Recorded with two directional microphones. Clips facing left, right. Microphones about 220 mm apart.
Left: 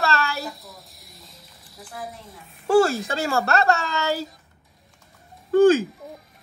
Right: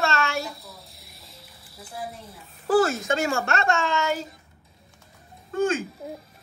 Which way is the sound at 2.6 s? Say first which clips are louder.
Left 3 dB; 30° left (ahead or behind).